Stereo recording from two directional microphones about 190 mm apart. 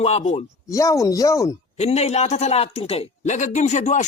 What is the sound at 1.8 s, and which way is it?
Speech, 35° left (ahead or behind).